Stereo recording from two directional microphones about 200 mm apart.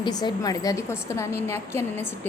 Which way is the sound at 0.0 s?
20° left (ahead or behind).